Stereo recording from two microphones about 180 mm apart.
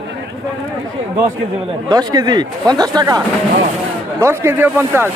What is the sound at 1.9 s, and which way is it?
A man's voice, 20° right (ahead or behind).